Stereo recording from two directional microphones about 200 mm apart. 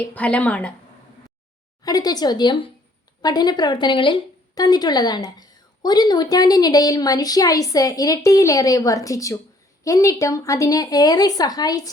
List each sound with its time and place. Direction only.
0.1 s speech: 5° left (ahead or behind)
1.8 s a woman's voice: 20° left (ahead or behind)